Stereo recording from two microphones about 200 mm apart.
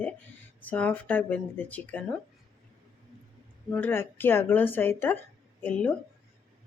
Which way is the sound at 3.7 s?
10° left (ahead or behind).